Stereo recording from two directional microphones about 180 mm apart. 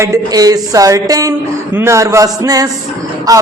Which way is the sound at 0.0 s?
20° right (ahead or behind).